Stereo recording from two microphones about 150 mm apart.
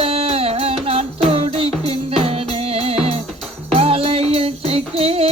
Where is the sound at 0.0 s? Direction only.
40° right (ahead or behind).